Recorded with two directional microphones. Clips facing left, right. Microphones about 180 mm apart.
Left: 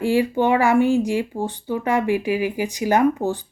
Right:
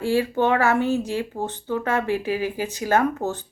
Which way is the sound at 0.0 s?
15° left (ahead or behind).